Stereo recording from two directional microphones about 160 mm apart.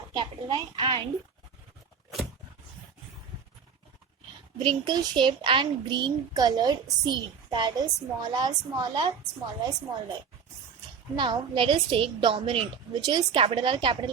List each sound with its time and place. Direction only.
0.1 s a child's voice: 25° right (ahead or behind)
4.6 s a child's voice: 30° right (ahead or behind)
11.2 s a woman's voice: 30° right (ahead or behind)